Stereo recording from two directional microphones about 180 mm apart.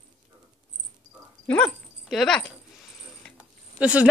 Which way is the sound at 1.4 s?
5° left (ahead or behind).